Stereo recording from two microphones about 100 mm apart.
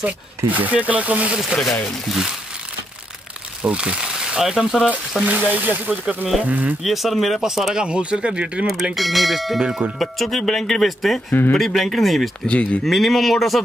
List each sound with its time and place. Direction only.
0.5 s speech: 15° right (ahead or behind)
1.9 s speech: centre (ahead or behind)
3.6 s speech: 10° right (ahead or behind)
4.8 s speech: 15° right (ahead or behind)
6.8 s speech: centre (ahead or behind)
12.4 s speech: 15° left (ahead or behind)
12.8 s speech: centre (ahead or behind)